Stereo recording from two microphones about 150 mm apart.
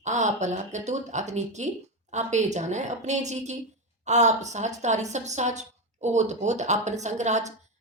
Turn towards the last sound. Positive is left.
turn(degrees=-50)  # may be behind; listen again after turning